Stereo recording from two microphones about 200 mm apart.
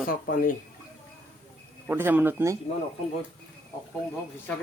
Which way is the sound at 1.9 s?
10° right (ahead or behind).